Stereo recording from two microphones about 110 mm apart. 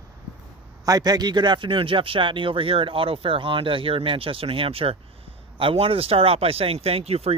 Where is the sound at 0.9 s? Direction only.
35° right (ahead or behind).